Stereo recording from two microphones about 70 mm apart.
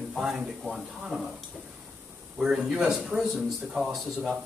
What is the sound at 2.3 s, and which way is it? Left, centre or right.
Speech, centre.